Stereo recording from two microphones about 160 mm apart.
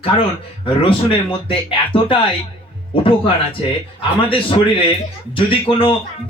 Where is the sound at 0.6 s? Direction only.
35° left (ahead or behind).